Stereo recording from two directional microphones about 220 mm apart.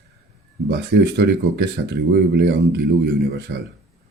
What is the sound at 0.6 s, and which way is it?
Speech, 50° right (ahead or behind).